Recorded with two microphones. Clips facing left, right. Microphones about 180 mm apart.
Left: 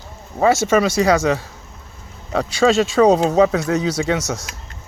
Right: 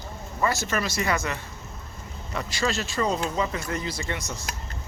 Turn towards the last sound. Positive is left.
turn(degrees=85)